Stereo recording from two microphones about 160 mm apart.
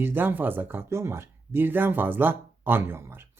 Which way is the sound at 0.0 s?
15° right (ahead or behind).